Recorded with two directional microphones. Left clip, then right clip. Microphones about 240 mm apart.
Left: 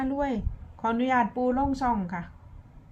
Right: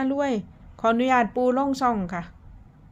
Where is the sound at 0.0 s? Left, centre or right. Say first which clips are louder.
Right 4 dB; right.